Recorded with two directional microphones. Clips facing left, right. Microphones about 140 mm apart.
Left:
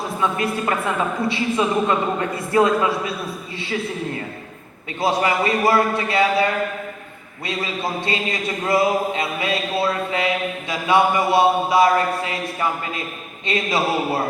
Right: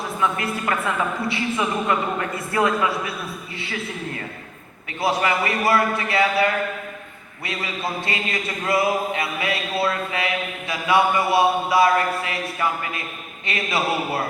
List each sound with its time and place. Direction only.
0.2 s a man's voice: 25° left (ahead or behind)
4.9 s a man's voice: 25° left (ahead or behind)